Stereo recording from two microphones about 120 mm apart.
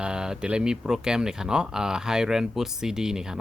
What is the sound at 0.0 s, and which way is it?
Speech, 5° right (ahead or behind).